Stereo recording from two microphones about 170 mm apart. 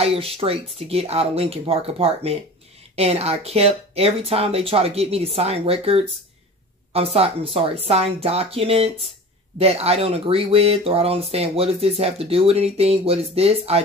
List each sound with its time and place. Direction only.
0.0 s speech: 35° right (ahead or behind)